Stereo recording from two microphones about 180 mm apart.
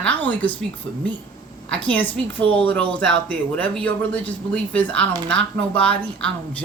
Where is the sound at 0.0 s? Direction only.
10° left (ahead or behind).